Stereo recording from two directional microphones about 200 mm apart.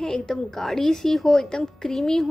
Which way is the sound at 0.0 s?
5° left (ahead or behind).